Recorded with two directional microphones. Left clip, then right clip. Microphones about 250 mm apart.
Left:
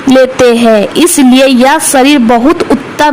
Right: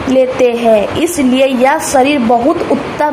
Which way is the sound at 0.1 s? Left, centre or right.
Left.